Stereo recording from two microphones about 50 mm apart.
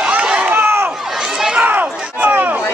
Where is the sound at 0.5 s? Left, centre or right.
Right.